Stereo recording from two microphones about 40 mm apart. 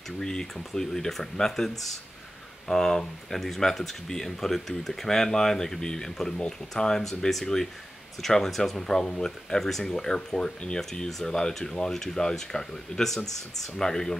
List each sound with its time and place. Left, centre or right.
0.2 s speech: centre
2.7 s speech: centre